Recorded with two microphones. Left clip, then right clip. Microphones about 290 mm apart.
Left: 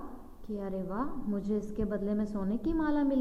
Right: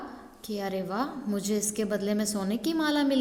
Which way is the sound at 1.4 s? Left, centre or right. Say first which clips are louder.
Right 5 dB; centre.